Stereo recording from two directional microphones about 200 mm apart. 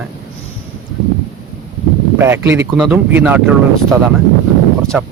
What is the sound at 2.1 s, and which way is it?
Speech, 10° right (ahead or behind).